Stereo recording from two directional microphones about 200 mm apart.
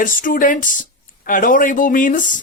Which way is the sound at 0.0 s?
40° left (ahead or behind).